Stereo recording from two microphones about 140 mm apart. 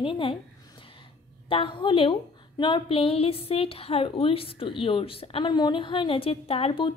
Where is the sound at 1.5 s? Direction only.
40° left (ahead or behind).